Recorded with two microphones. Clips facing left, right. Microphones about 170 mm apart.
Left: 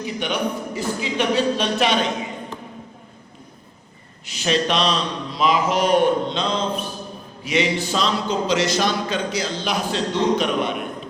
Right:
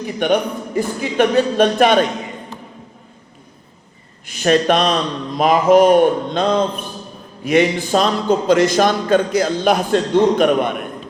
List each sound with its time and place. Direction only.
0.0 s a man's voice: 50° right (ahead or behind)
4.3 s a man's voice: 50° right (ahead or behind)